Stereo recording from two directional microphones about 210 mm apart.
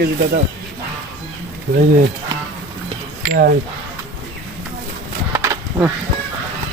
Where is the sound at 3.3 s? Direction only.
45° right (ahead or behind).